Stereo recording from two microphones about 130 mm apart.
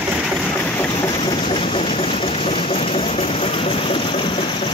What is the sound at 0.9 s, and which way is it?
Vehicle, 40° left (ahead or behind).